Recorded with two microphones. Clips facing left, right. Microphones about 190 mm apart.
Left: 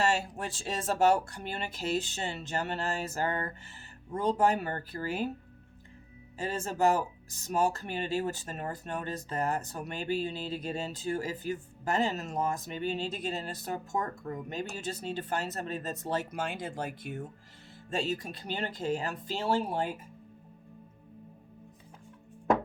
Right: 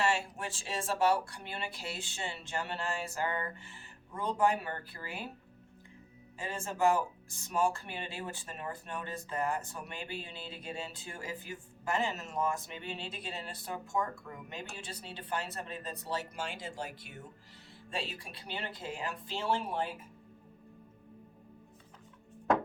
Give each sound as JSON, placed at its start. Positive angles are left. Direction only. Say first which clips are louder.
{"t": 0.0, "sound": "speech", "louder": "left 3 dB", "side_deg": 40}
{"t": 6.4, "sound": "speech", "louder": "left 3 dB", "side_deg": 40}